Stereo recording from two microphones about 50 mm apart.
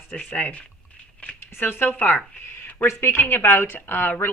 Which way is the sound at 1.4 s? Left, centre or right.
Left.